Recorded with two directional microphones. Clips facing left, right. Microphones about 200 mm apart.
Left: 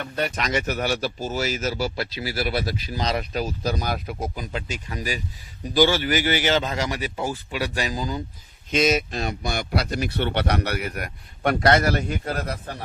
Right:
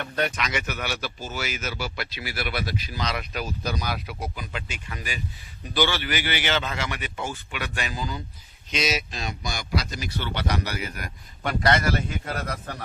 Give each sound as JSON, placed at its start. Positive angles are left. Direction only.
{"t": 0.0, "sound": "speech", "side_deg": 5}
{"t": 0.3, "sound": "speech", "side_deg": 40}
{"t": 3.8, "sound": "speech", "side_deg": 45}
{"t": 8.7, "sound": "speech", "side_deg": 50}